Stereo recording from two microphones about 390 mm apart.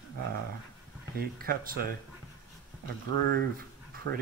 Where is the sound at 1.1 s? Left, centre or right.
Right.